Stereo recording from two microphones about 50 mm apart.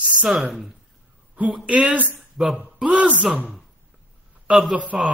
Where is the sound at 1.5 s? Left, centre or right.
Right.